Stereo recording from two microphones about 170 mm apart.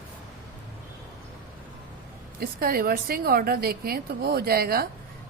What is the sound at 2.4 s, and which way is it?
A woman's voice, 60° right (ahead or behind).